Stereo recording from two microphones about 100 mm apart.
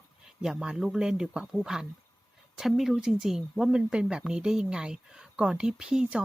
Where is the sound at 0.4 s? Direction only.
5° right (ahead or behind).